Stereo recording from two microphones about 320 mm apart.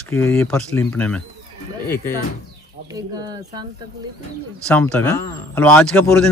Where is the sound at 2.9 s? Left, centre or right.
Centre.